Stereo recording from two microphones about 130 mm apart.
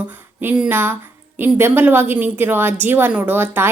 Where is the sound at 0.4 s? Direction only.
10° right (ahead or behind).